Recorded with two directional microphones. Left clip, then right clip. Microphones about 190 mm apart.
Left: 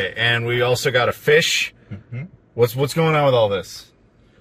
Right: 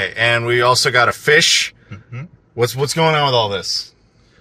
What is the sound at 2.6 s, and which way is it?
Speech, 15° right (ahead or behind).